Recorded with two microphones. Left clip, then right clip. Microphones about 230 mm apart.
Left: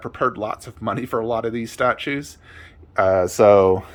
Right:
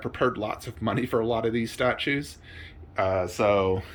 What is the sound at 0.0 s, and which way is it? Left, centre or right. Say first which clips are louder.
Speech: left 4 dB; centre.